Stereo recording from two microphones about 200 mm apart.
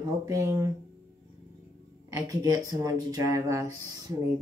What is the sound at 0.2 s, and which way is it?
Speech, 15° right (ahead or behind).